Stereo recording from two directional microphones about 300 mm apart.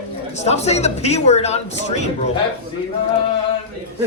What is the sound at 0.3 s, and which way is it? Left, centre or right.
Speech, left.